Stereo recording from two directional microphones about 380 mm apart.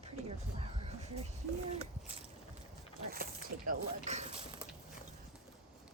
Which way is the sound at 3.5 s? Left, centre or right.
Right.